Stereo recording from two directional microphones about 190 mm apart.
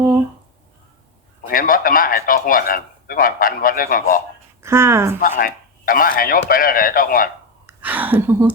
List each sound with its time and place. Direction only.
1.5 s a man's voice: 50° left (ahead or behind)
4.6 s speech: 15° right (ahead or behind)
5.4 s a man's voice: 50° left (ahead or behind)
7.7 s speech: 10° right (ahead or behind)